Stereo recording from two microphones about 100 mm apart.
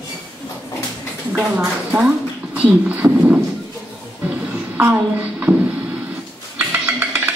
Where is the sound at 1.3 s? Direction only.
15° right (ahead or behind).